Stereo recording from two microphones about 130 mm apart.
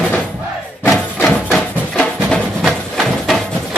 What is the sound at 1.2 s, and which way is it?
Music, centre (ahead or behind).